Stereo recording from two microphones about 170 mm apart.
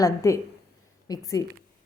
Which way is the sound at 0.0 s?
20° left (ahead or behind).